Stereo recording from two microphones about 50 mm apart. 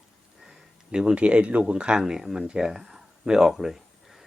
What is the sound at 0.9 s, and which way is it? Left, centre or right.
Speech, centre.